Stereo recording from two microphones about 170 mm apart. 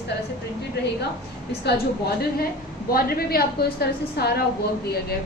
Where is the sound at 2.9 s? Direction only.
65° left (ahead or behind).